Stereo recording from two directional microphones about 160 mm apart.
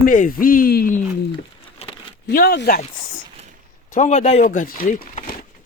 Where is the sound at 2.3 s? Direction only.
65° left (ahead or behind).